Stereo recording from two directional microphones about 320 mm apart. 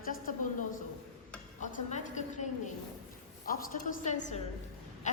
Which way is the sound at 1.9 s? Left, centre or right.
Left.